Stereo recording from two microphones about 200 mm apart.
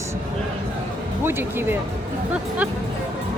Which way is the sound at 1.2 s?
10° right (ahead or behind).